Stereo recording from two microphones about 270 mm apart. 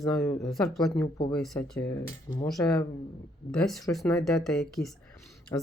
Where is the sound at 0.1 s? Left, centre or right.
Centre.